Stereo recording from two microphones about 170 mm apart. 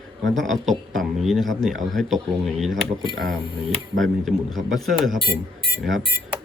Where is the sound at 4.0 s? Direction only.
Centre (ahead or behind).